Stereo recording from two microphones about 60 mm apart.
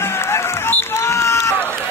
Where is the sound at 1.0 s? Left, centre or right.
Left.